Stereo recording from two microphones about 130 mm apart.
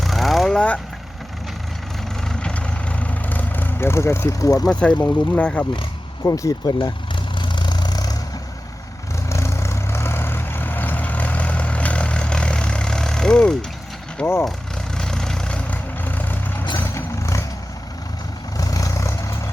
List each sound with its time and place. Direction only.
0.0 s vehicle: centre (ahead or behind)
2.2 s vehicle: 10° left (ahead or behind); by 4.6 s 25° left (ahead or behind)
4.6 s speech: 5° left (ahead or behind)
6.2 s speech: 25° left (ahead or behind)
7.3 s vehicle: 35° left (ahead or behind)
9.3 s vehicle: 20° left (ahead or behind); by 13.7 s 5° left (ahead or behind)
14.2 s speech: 10° left (ahead or behind)
14.9 s vehicle: 5° left (ahead or behind); by 17.4 s 20° left (ahead or behind)
18.5 s vehicle: 25° left (ahead or behind)